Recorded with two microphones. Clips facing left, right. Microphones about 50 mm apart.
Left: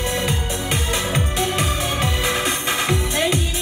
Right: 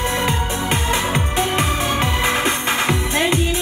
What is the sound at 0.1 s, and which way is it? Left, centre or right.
Music, right.